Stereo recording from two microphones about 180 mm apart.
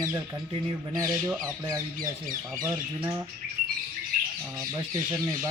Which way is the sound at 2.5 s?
20° right (ahead or behind).